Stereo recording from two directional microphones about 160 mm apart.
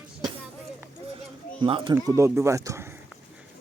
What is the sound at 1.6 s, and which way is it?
Speech, 30° right (ahead or behind).